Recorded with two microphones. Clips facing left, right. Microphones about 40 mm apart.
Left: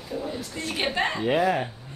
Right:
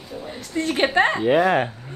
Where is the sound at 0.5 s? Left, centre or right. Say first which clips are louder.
Right 12 dB; right.